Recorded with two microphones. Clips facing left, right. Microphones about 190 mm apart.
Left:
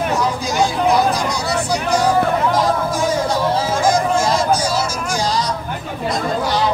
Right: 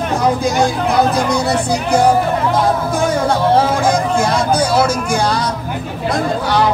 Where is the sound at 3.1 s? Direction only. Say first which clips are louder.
Right 5 dB; 60° right (ahead or behind).